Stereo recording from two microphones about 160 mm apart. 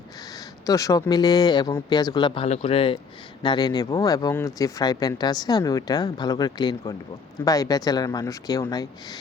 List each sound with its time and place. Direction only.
0.6 s speech: 20° left (ahead or behind)